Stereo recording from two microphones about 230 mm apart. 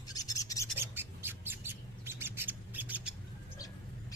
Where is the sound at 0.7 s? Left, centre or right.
Centre.